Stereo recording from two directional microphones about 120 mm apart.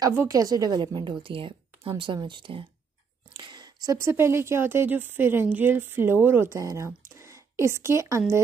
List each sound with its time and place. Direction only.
0.1 s a woman's voice: 25° right (ahead or behind)